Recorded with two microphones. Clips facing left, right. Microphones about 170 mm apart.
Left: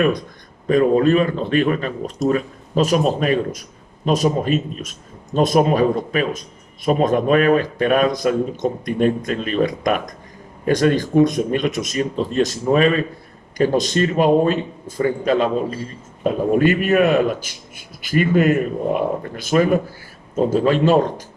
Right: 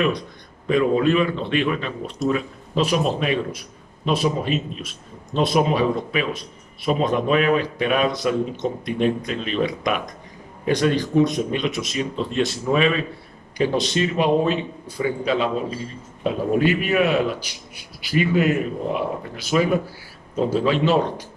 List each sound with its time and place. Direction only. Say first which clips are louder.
0.7 s a man's voice: left 4 dB; 45° left (ahead or behind)